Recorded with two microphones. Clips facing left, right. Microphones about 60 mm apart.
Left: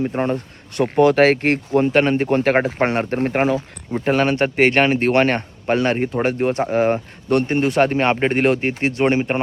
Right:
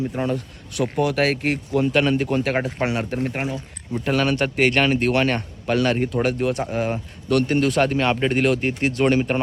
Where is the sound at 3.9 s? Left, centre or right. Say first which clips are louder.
Left 3 dB; left.